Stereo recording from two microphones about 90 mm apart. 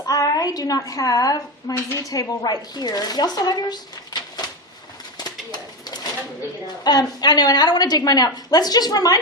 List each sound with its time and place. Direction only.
0.0 s a woman's voice: 40° left (ahead or behind)
5.1 s bird: 50° left (ahead or behind)
6.8 s speech: 50° left (ahead or behind)